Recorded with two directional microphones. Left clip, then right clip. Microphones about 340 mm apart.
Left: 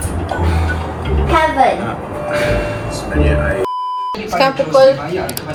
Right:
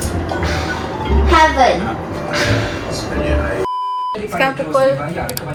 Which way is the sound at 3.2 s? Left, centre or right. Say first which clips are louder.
Left 3 dB; left.